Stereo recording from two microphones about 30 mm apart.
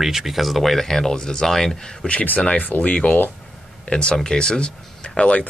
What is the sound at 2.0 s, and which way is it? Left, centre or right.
Speech, left.